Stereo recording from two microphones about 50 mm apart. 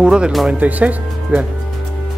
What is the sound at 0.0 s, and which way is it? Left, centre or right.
Speech, centre.